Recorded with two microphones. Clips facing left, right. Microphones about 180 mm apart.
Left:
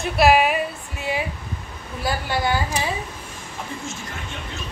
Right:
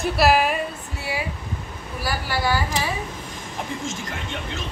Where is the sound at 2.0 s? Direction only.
20° left (ahead or behind).